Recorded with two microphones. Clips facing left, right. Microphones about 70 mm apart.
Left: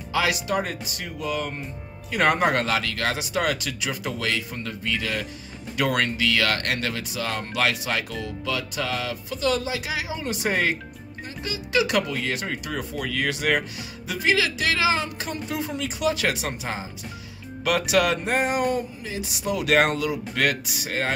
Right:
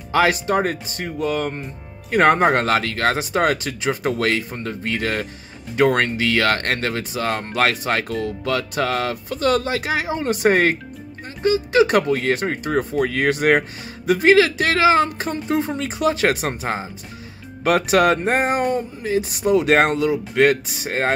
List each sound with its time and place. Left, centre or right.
0.1 s speech: right